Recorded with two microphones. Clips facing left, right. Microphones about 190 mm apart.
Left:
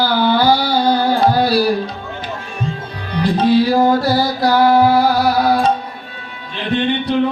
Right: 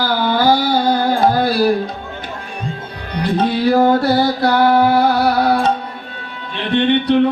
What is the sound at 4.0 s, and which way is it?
Music, 60° right (ahead or behind).